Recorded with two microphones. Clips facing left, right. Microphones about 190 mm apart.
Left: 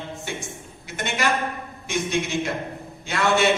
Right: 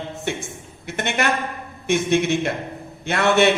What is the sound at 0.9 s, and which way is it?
A man's voice, 60° right (ahead or behind).